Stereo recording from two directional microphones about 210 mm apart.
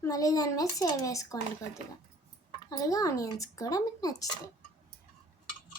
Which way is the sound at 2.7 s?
15° left (ahead or behind).